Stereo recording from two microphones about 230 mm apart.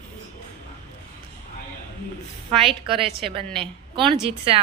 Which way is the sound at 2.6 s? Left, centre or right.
Right.